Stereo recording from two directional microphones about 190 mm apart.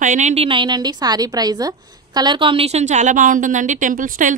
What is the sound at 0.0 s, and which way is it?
A woman's voice, 40° right (ahead or behind).